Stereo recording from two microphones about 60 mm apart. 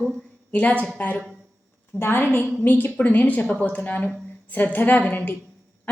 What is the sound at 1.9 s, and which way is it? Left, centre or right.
Speech, left.